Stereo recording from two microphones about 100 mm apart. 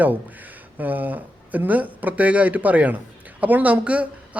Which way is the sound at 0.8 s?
15° right (ahead or behind).